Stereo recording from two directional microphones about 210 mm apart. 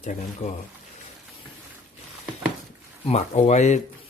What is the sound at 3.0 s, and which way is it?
Speech, 30° left (ahead or behind).